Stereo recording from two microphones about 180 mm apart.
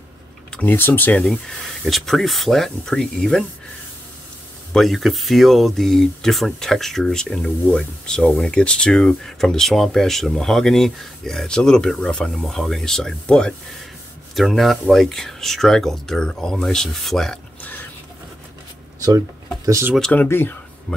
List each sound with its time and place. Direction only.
0.5 s speech: 10° left (ahead or behind)
4.7 s speech: centre (ahead or behind)
18.9 s speech: 20° right (ahead or behind)
20.0 s speech: 10° left (ahead or behind)